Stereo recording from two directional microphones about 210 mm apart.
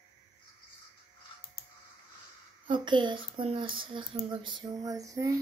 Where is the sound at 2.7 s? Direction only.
20° right (ahead or behind).